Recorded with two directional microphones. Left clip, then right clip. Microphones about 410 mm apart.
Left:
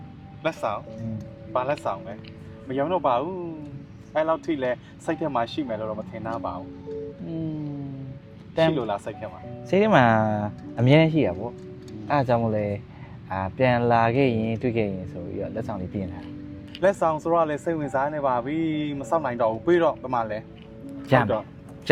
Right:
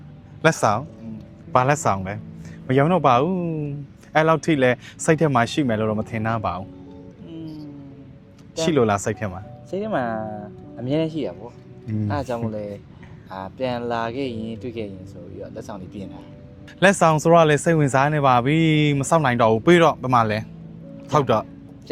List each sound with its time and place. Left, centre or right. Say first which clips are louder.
0.4 s speech: right 8 dB; right
8.7 s speech: right 8 dB; right
9.6 s speech: left 7 dB; left
16.8 s speech: right 6 dB; right